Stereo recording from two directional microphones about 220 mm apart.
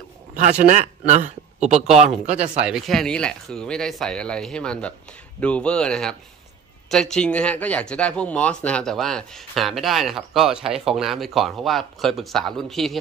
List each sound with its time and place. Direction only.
0.3 s a man's voice: 35° right (ahead or behind)
2.6 s speech: centre (ahead or behind)